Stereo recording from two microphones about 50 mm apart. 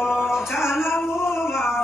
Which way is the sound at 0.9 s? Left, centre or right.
Left.